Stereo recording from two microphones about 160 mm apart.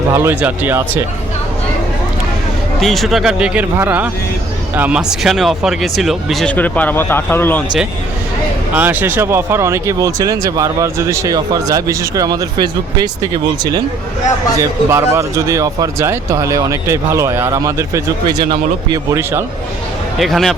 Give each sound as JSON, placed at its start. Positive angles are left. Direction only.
{"t": 0.1, "sound": "speech", "side_deg": -15}
{"t": 2.8, "sound": "speech", "side_deg": 0}
{"t": 8.7, "sound": "speech", "side_deg": -10}
{"t": 18.9, "sound": "speech", "side_deg": -15}
{"t": 20.1, "sound": "speech", "side_deg": 0}